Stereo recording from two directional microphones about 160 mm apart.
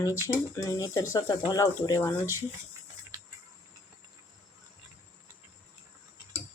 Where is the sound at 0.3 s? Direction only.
20° left (ahead or behind).